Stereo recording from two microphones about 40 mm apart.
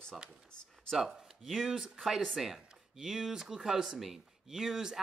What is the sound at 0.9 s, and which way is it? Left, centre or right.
Speech, centre.